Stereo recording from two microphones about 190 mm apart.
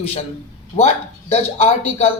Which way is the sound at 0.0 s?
30° left (ahead or behind).